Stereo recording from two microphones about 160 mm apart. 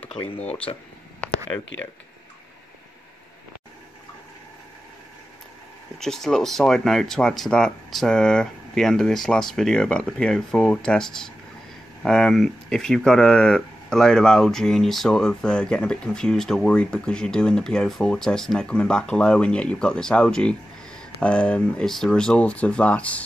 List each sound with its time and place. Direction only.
0.0 s speech: 40° left (ahead or behind)
5.9 s speech: 5° left (ahead or behind)